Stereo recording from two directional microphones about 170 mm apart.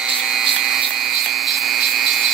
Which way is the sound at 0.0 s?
5° right (ahead or behind).